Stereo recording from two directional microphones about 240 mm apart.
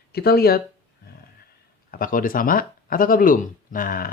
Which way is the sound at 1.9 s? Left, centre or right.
Left.